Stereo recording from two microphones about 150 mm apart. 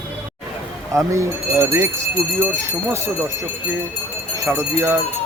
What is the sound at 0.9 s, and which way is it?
Speech, 20° right (ahead or behind).